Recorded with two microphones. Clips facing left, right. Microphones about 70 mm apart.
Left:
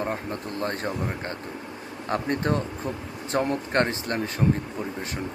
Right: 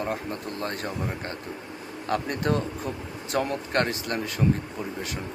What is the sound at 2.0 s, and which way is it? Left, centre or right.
A man's voice, left.